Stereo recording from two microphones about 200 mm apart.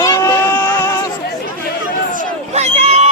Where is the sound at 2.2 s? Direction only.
35° right (ahead or behind).